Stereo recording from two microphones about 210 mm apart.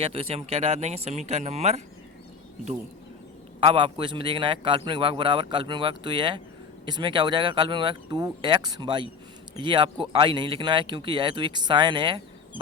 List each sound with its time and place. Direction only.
0.0 s speech: 25° right (ahead or behind)
3.6 s speech: 25° right (ahead or behind)